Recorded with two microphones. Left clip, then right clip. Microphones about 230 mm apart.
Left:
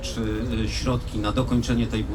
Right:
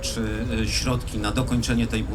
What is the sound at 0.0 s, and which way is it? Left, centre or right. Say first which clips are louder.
Speech: even; right.